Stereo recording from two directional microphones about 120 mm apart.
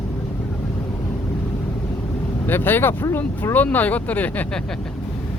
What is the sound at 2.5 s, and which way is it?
Speech, 15° left (ahead or behind).